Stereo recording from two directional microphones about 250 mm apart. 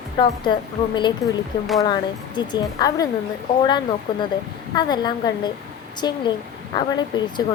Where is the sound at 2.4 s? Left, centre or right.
Centre.